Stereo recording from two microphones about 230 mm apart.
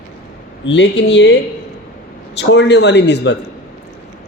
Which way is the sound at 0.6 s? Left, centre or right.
Left.